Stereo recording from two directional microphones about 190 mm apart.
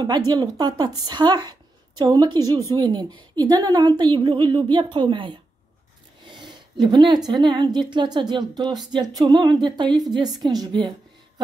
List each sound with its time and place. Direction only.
0.3 s a woman's voice: 20° right (ahead or behind)
6.2 s a sound: 25° right (ahead or behind)
7.2 s a woman's voice: 25° right (ahead or behind)